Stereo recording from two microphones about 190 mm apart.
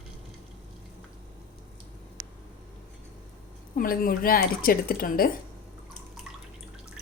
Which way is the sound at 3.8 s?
50° left (ahead or behind).